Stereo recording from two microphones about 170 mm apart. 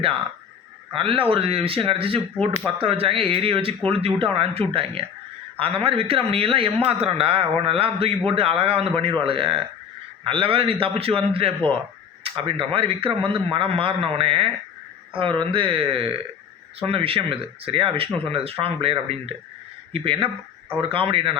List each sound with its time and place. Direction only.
0.9 s a man's voice: 30° right (ahead or behind)